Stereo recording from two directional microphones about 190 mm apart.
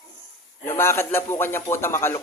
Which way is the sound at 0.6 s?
15° left (ahead or behind).